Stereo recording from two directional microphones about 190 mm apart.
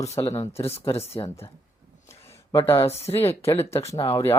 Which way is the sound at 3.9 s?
15° left (ahead or behind).